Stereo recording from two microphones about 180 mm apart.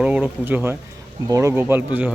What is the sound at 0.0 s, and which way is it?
Speech, 5° right (ahead or behind).